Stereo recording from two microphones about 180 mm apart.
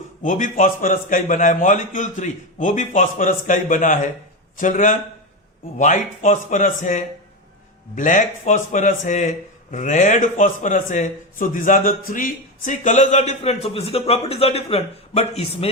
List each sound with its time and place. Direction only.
0.2 s a man's voice: 45° left (ahead or behind)